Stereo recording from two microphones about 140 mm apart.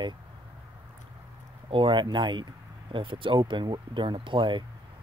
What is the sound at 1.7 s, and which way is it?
Speech, 35° right (ahead or behind).